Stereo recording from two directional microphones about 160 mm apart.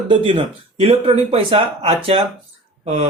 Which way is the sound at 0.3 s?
35° right (ahead or behind).